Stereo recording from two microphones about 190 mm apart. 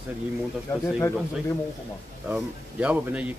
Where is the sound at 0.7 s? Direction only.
20° left (ahead or behind).